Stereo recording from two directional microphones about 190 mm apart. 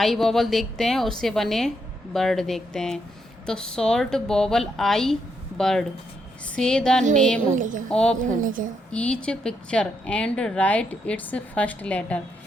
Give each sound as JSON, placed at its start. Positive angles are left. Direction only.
{"t": 0.0, "sound": "a woman's voice", "side_deg": 0}
{"t": 7.5, "sound": "a woman's voice", "side_deg": -40}
{"t": 7.9, "sound": "a woman's voice", "side_deg": 5}
{"t": 8.2, "sound": "a woman's voice", "side_deg": -45}
{"t": 8.9, "sound": "a woman's voice", "side_deg": 5}